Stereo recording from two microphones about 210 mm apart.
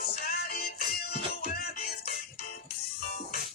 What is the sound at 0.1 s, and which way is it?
Music, 45° left (ahead or behind).